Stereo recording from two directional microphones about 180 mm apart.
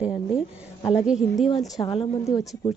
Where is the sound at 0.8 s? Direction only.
30° left (ahead or behind).